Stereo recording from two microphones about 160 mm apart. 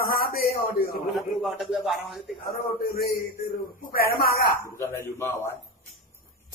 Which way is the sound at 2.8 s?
65° left (ahead or behind).